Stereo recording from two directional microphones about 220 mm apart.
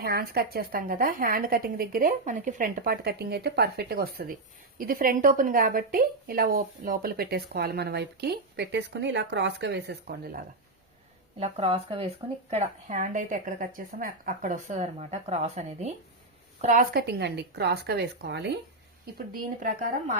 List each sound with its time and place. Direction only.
0.0 s a woman's voice: 45° right (ahead or behind)
11.3 s a woman's voice: 30° right (ahead or behind)
16.9 s a woman's voice: 45° right (ahead or behind)